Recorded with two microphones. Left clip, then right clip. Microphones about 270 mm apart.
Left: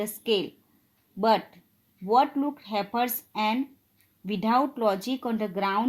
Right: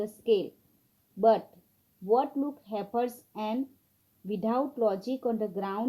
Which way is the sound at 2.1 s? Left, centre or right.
Left.